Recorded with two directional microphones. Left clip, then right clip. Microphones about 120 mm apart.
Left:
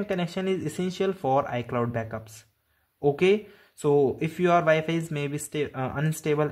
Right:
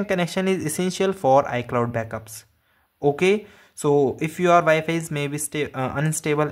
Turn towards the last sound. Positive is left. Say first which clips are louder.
# right 3 dB
turn(degrees=-5)  # may be behind; listen again after turning